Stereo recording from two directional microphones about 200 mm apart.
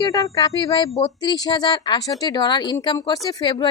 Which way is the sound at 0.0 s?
15° left (ahead or behind).